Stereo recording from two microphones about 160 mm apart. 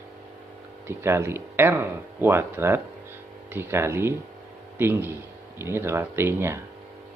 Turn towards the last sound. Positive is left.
turn(degrees=-15)  # may be behind; listen again after turning